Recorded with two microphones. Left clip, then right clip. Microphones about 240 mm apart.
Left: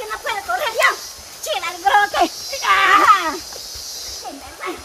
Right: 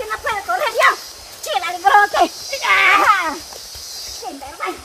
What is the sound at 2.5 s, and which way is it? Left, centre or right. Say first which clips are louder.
Sheep: even; right.